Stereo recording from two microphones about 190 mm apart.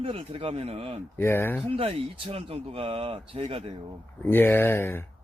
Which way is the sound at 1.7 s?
30° right (ahead or behind).